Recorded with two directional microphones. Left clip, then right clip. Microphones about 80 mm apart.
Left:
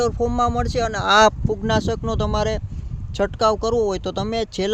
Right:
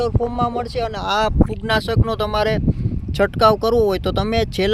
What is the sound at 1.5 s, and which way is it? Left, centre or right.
Speech, right.